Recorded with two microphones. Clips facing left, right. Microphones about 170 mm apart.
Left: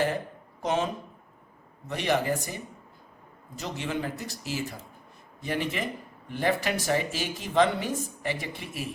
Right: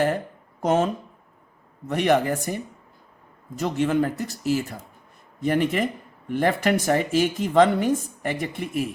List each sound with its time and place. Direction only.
0.6 s speech: 50° right (ahead or behind)
1.9 s speech: 55° right (ahead or behind)
3.6 s speech: 50° right (ahead or behind)